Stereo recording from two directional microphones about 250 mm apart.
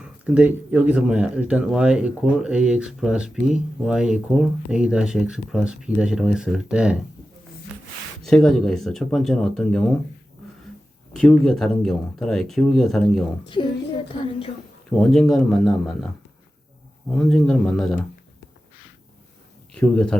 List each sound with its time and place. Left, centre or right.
0.3 s speech: centre
8.2 s speech: centre
11.1 s speech: centre
14.1 s a woman's voice: left
14.8 s speech: centre
17.2 s speech: centre
19.7 s speech: centre